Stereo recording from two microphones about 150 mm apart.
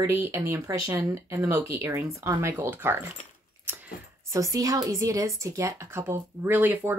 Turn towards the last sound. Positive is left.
turn(degrees=-10)  # may be behind; listen again after turning